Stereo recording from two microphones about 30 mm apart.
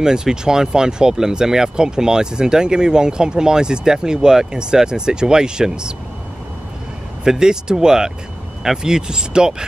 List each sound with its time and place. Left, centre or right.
0.0 s speech: right
7.2 s speech: right